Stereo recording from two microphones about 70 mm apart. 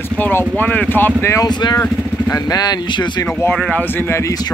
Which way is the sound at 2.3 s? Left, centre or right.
Left.